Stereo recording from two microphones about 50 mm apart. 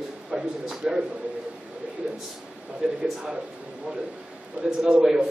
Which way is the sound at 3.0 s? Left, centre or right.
Centre.